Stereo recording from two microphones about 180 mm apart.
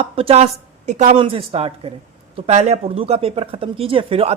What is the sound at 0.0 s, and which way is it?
A woman's voice, 30° right (ahead or behind).